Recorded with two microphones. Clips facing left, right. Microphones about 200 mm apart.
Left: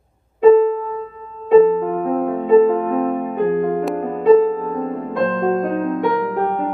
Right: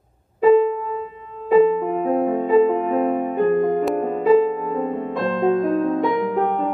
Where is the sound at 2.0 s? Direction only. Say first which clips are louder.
Left 1 dB; 5° right (ahead or behind).